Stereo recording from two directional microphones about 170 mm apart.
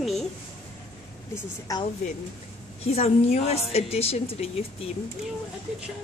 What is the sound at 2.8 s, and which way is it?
A woman's voice, 40° left (ahead or behind).